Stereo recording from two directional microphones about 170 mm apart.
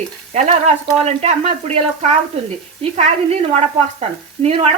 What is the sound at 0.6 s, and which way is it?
Speech, 40° right (ahead or behind).